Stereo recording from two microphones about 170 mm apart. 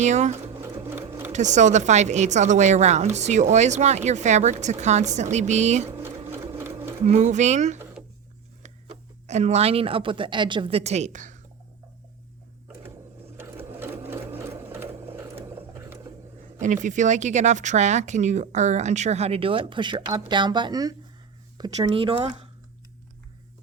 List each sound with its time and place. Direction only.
0.0 s speech: 45° right (ahead or behind)
0.4 s sewing machine: 15° right (ahead or behind)
1.3 s speech: 45° right (ahead or behind)
6.0 s sewing machine: 15° right (ahead or behind)
7.0 s speech: 45° right (ahead or behind)
13.7 s sewing machine: 15° right (ahead or behind)
16.6 s speech: 45° right (ahead or behind)